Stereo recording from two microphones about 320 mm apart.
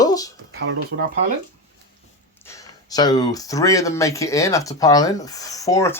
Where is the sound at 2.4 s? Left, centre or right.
Centre.